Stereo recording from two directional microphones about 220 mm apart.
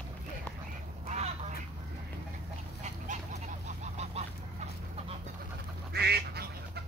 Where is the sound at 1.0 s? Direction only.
30° right (ahead or behind).